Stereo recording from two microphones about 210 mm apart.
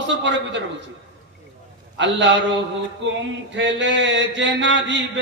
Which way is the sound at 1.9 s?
60° right (ahead or behind).